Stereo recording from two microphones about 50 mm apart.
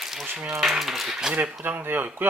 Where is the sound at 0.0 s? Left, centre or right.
Centre.